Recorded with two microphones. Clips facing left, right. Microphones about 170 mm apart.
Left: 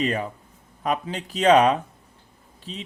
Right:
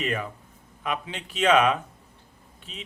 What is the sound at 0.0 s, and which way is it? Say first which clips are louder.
Speech: left 4 dB; 35° left (ahead or behind).